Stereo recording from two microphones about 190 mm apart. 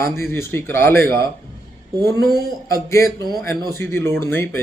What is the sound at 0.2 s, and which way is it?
A man's voice, 10° left (ahead or behind).